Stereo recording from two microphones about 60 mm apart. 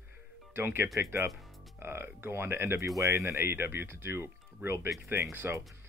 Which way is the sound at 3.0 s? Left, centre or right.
Right.